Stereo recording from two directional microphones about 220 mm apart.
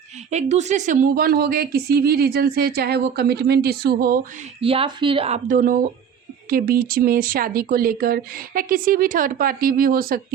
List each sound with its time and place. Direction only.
0.3 s speech: 30° right (ahead or behind)
4.6 s speech: 25° right (ahead or behind); by 10.2 s 40° right (ahead or behind)